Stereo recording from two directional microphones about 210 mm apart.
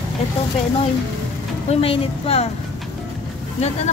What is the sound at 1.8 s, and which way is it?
Speech, 25° left (ahead or behind).